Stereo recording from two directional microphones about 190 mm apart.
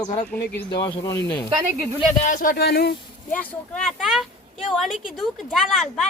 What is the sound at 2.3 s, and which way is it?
Speech, 45° left (ahead or behind).